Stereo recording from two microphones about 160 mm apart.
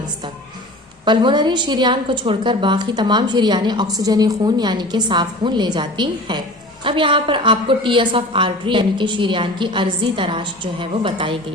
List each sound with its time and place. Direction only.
1.0 s a woman's voice: 30° right (ahead or behind)